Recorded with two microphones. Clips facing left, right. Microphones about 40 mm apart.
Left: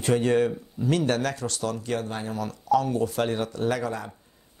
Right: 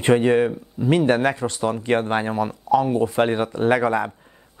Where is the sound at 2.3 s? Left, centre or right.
Right.